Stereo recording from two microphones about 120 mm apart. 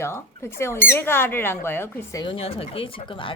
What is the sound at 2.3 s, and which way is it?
Speech, 55° left (ahead or behind).